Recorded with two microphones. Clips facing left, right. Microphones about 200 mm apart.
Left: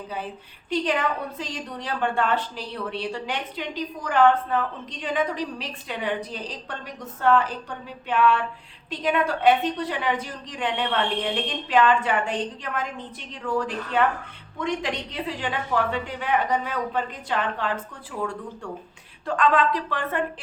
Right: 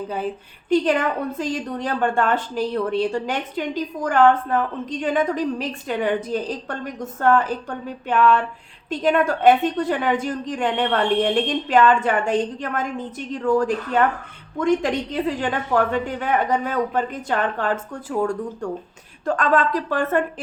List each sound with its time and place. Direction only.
0.7 s a woman's voice: 50° right (ahead or behind)